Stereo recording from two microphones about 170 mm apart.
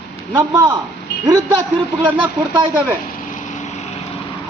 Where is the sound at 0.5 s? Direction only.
25° right (ahead or behind).